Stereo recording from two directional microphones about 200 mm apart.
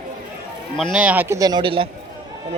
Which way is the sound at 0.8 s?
Centre (ahead or behind).